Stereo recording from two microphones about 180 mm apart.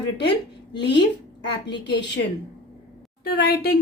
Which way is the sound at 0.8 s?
70° left (ahead or behind).